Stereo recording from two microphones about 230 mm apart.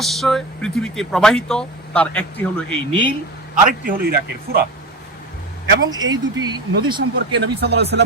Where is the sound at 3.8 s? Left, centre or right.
Right.